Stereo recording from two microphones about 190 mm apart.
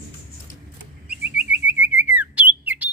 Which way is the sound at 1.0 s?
5° right (ahead or behind).